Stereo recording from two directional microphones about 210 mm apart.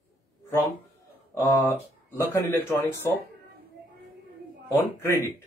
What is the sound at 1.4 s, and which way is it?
Speech, 15° left (ahead or behind).